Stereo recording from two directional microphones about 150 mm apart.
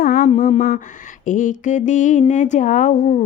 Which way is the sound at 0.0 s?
70° left (ahead or behind).